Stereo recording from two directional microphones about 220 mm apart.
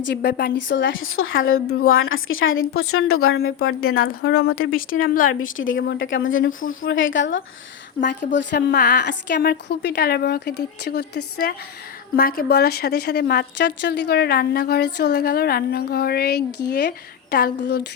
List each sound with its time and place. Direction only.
0.1 s a woman's voice: 50° left (ahead or behind); by 4.1 s 70° left (ahead or behind)
4.2 s a woman's voice: 45° left (ahead or behind)
5.5 s a woman's voice: 60° left (ahead or behind)